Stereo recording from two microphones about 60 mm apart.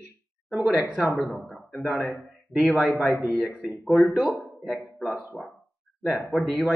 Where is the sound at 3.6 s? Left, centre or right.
Centre.